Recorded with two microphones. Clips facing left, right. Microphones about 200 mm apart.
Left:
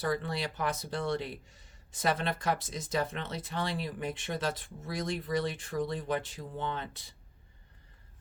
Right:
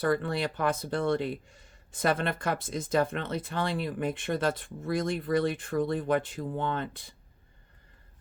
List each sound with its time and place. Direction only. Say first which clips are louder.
0.0 s speech: right 5 dB; 55° right (ahead or behind)